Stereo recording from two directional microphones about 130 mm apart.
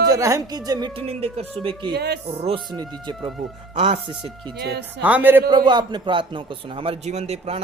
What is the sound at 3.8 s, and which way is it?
Speech, 45° right (ahead or behind).